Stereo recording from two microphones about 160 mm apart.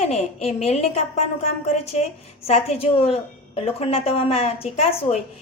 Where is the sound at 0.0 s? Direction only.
40° left (ahead or behind).